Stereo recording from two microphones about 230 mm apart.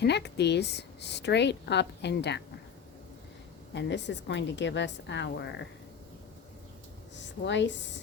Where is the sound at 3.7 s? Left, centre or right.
Left.